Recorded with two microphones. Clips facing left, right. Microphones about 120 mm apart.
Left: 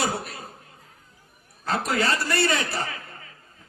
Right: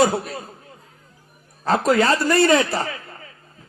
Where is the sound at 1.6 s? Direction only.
35° right (ahead or behind).